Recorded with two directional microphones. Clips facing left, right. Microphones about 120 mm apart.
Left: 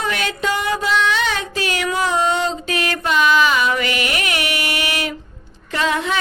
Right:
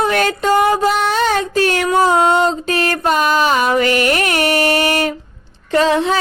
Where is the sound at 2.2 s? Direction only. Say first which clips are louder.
Right 5 dB; 50° right (ahead or behind).